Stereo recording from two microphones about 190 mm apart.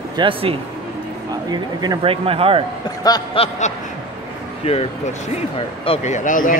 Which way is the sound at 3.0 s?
20° left (ahead or behind).